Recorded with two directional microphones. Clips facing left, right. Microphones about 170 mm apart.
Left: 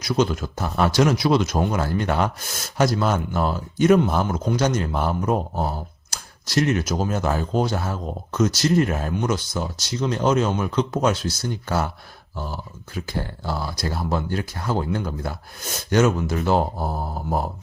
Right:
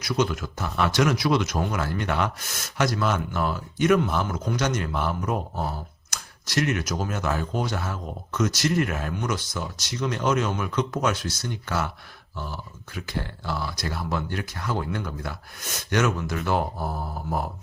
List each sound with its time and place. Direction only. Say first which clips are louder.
0.2 s speech: left 3 dB; 30° left (ahead or behind)